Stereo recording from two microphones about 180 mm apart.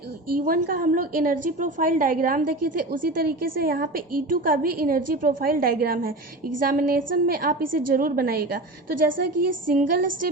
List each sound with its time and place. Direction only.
0.3 s a woman's voice: 50° right (ahead or behind)